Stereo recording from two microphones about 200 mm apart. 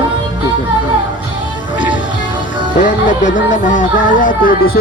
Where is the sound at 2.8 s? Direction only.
40° left (ahead or behind).